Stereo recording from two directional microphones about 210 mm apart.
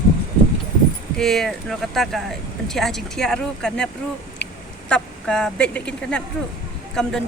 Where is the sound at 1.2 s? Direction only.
Centre (ahead or behind).